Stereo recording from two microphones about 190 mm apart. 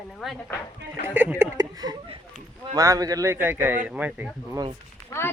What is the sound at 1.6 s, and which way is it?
Speech, 20° right (ahead or behind).